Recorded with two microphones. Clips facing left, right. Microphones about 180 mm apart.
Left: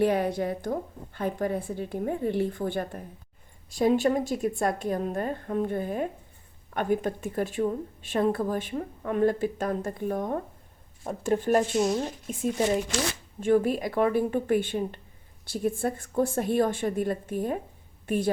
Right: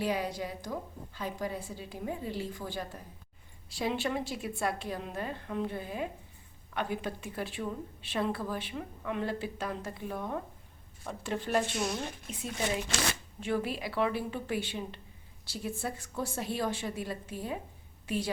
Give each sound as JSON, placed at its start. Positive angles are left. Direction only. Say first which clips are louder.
{"t": 0.0, "sound": "a woman's voice", "louder": "left 8 dB", "side_deg": 55}